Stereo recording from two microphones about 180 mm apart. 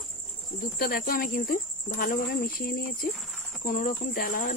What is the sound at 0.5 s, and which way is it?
Cricket, 55° left (ahead or behind).